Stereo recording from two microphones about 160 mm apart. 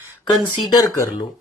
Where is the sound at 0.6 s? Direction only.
20° left (ahead or behind).